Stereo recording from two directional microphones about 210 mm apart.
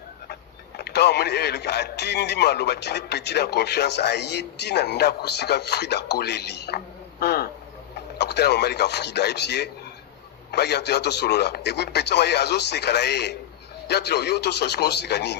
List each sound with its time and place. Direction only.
0.8 s a man's voice: 50° left (ahead or behind)